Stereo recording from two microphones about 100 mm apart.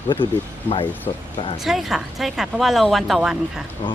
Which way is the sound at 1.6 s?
Centre (ahead or behind).